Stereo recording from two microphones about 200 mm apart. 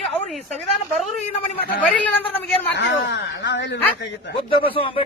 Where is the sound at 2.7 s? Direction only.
60° left (ahead or behind).